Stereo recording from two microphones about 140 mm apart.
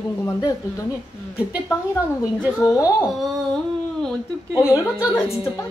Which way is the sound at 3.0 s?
Centre (ahead or behind).